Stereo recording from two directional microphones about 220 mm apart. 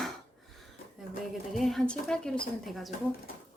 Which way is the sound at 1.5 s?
Centre (ahead or behind).